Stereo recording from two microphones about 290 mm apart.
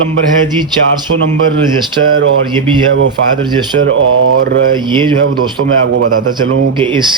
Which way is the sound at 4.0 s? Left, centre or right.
Right.